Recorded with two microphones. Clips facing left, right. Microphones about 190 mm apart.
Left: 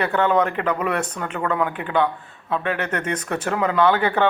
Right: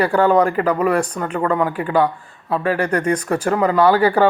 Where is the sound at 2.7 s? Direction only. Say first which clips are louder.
Right 6 dB; 35° right (ahead or behind).